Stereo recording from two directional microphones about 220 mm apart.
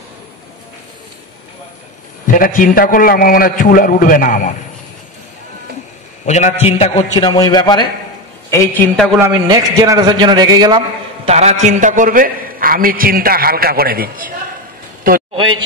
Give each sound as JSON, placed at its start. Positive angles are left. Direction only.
{"t": 2.3, "sound": "a man's voice", "side_deg": 40}
{"t": 6.2, "sound": "a man's voice", "side_deg": 30}
{"t": 9.2, "sound": "a man's voice", "side_deg": -20}
{"t": 11.2, "sound": "a man's voice", "side_deg": -30}